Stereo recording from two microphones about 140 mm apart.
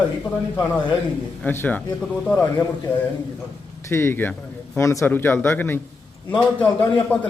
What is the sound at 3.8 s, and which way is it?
Speech, 15° left (ahead or behind).